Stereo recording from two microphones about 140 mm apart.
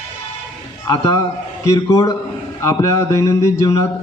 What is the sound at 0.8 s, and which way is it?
A man's voice, 25° left (ahead or behind).